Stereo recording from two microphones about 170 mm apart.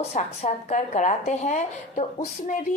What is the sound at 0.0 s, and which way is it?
A man's voice, 40° left (ahead or behind).